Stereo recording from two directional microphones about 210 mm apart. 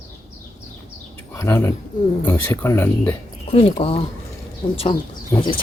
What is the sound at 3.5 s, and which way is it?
Speech, 25° left (ahead or behind).